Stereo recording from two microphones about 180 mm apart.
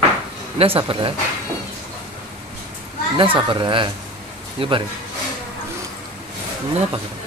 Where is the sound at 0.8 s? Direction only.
30° right (ahead or behind).